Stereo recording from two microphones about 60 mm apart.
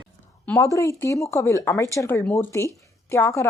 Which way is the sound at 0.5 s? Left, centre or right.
Left.